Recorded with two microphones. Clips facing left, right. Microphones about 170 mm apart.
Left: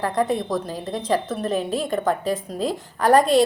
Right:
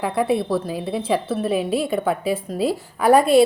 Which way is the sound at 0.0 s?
10° right (ahead or behind).